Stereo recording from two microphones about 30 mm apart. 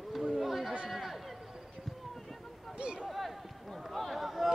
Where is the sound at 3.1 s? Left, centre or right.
Centre.